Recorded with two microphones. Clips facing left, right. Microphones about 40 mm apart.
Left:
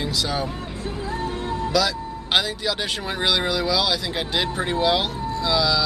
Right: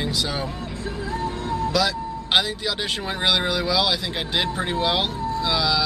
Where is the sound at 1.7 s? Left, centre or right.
Centre.